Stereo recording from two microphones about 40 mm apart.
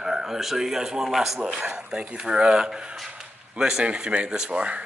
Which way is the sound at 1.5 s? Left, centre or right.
Right.